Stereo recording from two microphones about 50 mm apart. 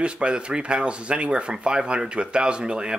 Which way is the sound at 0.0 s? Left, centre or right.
Right.